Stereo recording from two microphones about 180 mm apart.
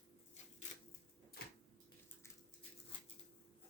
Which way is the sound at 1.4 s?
55° left (ahead or behind).